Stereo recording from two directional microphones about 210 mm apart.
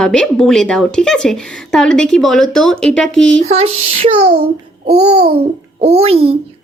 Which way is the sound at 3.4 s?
30° right (ahead or behind).